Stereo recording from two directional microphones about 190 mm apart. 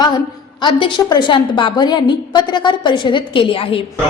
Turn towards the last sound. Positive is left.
turn(degrees=30)  # may be behind; listen again after turning